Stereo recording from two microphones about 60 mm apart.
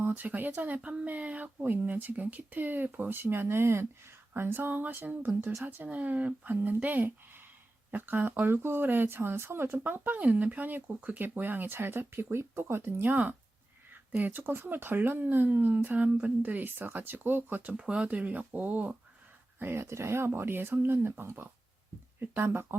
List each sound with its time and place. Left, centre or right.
0.0 s speech: right
0.8 s speech: centre; by 12.9 s right
13.0 s speech: right
17.7 s speech: centre
19.5 s speech: right